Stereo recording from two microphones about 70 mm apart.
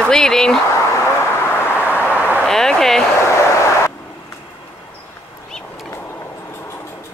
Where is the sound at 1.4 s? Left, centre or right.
Left.